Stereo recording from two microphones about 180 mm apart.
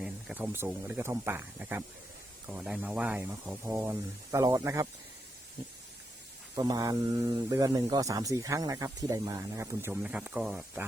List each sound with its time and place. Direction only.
0.0 s speech: 5° right (ahead or behind)
6.6 s speech: 20° right (ahead or behind)